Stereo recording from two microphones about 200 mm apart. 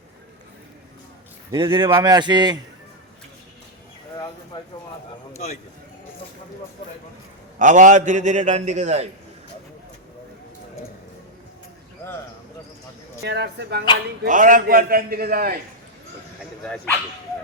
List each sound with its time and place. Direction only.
1.5 s speech: 25° right (ahead or behind)
7.6 s a man's voice: 40° right (ahead or behind)
13.2 s speech: 55° right (ahead or behind)
14.3 s a man's voice: 40° right (ahead or behind)
16.6 s speech: 5° left (ahead or behind)